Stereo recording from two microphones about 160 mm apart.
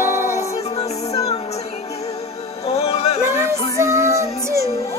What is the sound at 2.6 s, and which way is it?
Music, 40° left (ahead or behind).